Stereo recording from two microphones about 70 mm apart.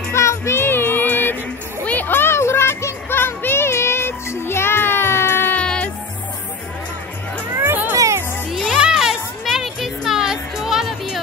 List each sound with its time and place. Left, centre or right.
0.1 s music: left
5.6 s music: centre
7.5 s music: right
7.9 s music: right
8.5 s music: centre